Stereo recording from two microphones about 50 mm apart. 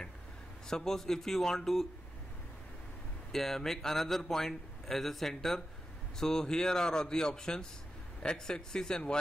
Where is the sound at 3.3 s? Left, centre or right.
Centre.